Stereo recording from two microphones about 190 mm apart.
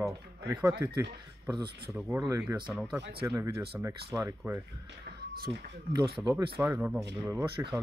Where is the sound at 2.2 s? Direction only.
15° right (ahead or behind).